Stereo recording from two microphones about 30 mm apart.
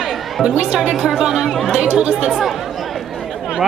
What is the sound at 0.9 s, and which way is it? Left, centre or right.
Speech, centre.